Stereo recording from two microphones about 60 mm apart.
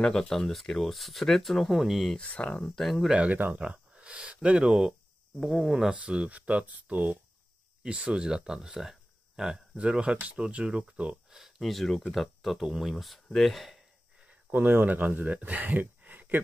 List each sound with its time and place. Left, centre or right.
0.0 s speech: centre
2.1 s speech: left
2.6 s speech: centre
3.1 s speech: centre
3.5 s a sound: centre
5.4 s speech: centre
5.9 s speech: centre
7.8 s speech: centre
11.2 s speech: centre
14.5 s speech: right